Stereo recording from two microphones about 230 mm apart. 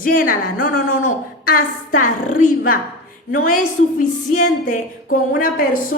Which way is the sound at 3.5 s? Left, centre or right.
Left.